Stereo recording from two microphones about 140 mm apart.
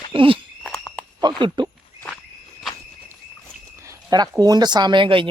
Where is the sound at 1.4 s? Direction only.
35° right (ahead or behind).